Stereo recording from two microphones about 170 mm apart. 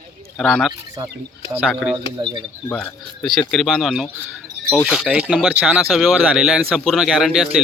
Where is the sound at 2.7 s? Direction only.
5° left (ahead or behind).